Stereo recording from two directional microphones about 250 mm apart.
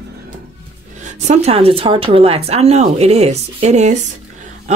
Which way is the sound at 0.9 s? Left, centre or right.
Right.